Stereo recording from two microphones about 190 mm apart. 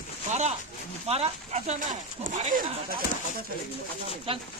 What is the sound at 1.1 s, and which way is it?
Speech, 35° right (ahead or behind).